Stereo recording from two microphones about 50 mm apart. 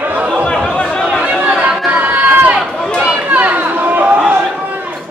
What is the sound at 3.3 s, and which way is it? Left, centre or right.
Chatter, right.